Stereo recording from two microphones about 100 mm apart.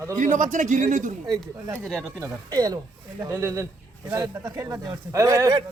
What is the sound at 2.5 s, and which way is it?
Speech, 40° right (ahead or behind).